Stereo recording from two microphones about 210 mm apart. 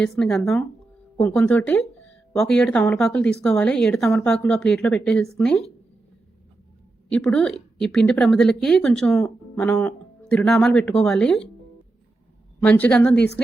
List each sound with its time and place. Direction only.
0.0 s speech: 5° left (ahead or behind)
7.1 s speech: 5° left (ahead or behind)
12.6 s a woman's voice: 5° left (ahead or behind)
13.1 s a woman's voice: 55° left (ahead or behind)